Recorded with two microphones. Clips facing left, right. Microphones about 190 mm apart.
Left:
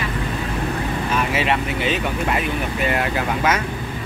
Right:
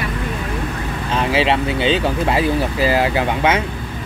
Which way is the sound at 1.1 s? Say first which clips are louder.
Right 5 dB; 30° right (ahead or behind).